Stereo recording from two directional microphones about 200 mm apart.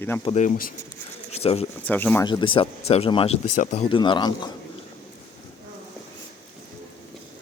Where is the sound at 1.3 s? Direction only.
30° left (ahead or behind).